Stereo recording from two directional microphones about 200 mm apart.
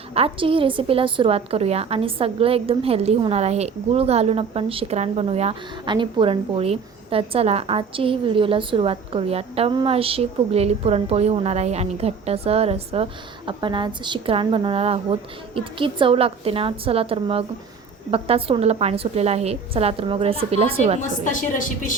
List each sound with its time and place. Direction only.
0.1 s a woman's voice: 30° right (ahead or behind)
21.2 s a woman's voice: 40° left (ahead or behind)